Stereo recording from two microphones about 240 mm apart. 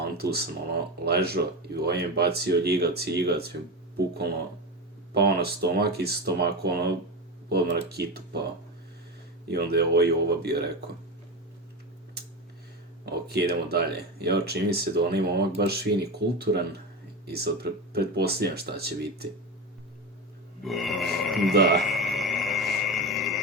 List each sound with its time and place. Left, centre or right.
0.0 s speech: right
5.1 s speech: right
9.5 s speech: right
13.1 s speech: right
20.7 s speech: centre
21.5 s speech: right
21.8 s a sound: centre